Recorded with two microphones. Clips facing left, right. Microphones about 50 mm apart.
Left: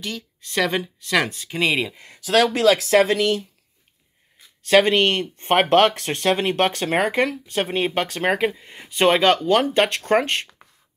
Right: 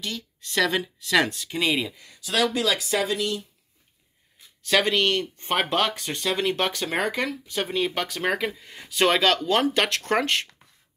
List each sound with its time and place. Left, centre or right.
0.0 s speech: left
2.1 s speech: left
4.6 s speech: left
6.3 s speech: left